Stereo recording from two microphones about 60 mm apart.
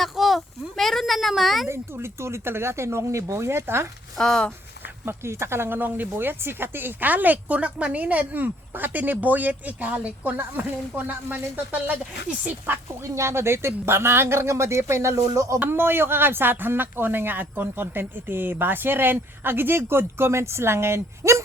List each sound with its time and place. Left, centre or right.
0.0 s speech: centre
1.6 s speech: right
4.2 s speech: centre
5.0 s speech: right
13.1 s speech: right
15.6 s speech: right